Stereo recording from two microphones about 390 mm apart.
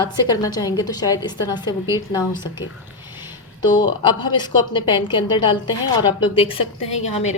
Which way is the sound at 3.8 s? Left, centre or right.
Centre.